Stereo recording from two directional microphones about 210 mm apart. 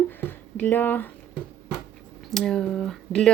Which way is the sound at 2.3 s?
Centre (ahead or behind).